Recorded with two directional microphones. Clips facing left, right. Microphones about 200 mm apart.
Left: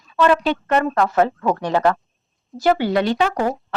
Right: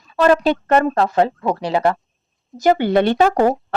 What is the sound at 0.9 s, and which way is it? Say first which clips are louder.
Speech: right 1 dB; 30° right (ahead or behind).